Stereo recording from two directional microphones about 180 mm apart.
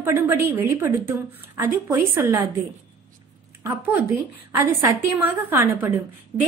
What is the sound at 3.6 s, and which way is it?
A woman's voice, 10° right (ahead or behind).